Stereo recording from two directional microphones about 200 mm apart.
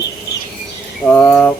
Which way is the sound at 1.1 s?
10° left (ahead or behind).